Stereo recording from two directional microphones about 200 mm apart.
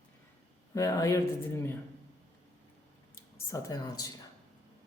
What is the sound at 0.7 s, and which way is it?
Speech, 15° left (ahead or behind).